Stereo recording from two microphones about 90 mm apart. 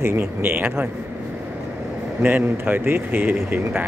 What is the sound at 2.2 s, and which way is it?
Speech, 20° right (ahead or behind).